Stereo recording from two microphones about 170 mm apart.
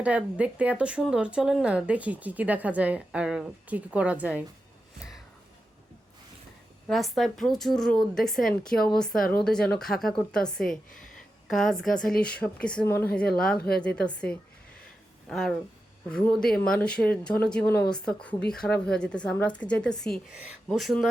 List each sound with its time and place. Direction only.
0.0 s speech: 10° right (ahead or behind)
6.8 s speech: centre (ahead or behind)
9.1 s speech: 55° left (ahead or behind)
9.4 s speech: 5° left (ahead or behind)
12.0 s speech: 60° left (ahead or behind)
12.3 s speech: 5° left (ahead or behind)
13.6 s a woman's voice: 65° left (ahead or behind)
13.8 s speech: 5° left (ahead or behind)